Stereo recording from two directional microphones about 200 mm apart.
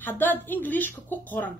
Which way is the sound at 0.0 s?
10° left (ahead or behind).